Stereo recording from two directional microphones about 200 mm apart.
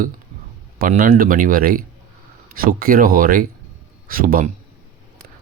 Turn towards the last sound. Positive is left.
turn(degrees=-45)  # may be behind; listen again after turning